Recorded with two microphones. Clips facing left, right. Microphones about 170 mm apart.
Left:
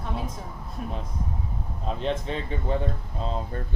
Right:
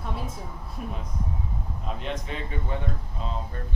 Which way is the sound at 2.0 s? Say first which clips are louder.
Left 6 dB; 35° left (ahead or behind).